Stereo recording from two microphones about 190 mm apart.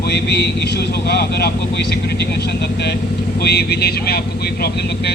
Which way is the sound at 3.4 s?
60° left (ahead or behind).